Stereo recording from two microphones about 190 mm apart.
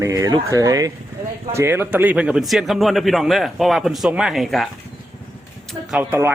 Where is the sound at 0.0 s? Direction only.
20° right (ahead or behind); by 4.7 s centre (ahead or behind).